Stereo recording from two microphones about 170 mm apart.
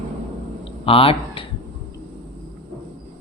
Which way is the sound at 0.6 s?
35° left (ahead or behind).